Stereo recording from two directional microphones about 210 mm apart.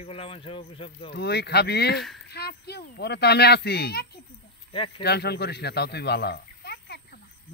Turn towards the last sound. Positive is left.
turn(degrees=50)  # may be behind; listen again after turning